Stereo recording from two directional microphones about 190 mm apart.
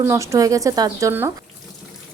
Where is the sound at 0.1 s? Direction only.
15° right (ahead or behind).